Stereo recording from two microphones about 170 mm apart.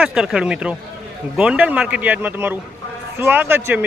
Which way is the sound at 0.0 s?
5° right (ahead or behind).